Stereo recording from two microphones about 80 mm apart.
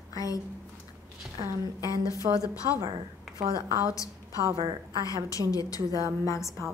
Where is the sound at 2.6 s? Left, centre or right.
Right.